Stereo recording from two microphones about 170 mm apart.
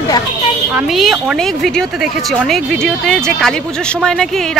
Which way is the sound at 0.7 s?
Centre (ahead or behind).